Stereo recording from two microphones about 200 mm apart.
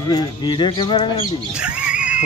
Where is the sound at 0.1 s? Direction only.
20° left (ahead or behind).